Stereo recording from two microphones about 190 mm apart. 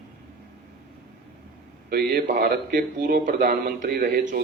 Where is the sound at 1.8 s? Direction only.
55° right (ahead or behind).